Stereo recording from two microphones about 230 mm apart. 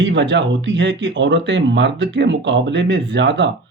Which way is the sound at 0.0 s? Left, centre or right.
Right.